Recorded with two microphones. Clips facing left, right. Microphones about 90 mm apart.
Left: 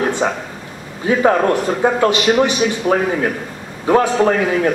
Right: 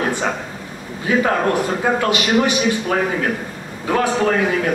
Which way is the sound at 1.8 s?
25° left (ahead or behind).